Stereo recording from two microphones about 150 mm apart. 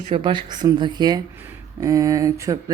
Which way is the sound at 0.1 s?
35° right (ahead or behind).